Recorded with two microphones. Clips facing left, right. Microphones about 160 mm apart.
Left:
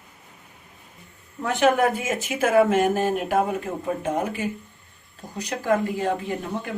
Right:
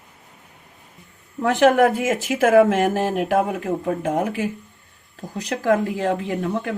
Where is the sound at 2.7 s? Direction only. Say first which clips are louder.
Right 1 dB; 90° right.